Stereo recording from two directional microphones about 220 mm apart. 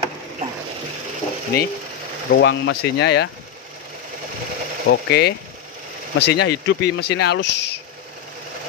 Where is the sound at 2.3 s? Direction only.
55° left (ahead or behind).